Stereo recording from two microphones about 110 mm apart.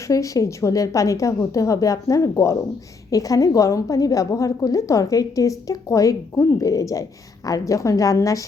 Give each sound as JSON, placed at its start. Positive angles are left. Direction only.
{"t": 0.1, "sound": "a woman's voice", "side_deg": 30}